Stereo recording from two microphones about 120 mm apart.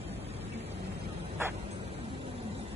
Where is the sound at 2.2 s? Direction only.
55° right (ahead or behind).